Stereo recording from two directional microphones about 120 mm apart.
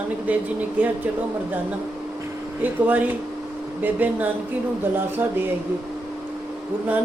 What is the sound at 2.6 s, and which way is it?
A woman's voice, 15° right (ahead or behind).